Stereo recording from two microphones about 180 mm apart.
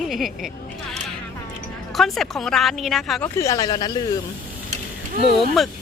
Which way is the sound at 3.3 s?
20° left (ahead or behind).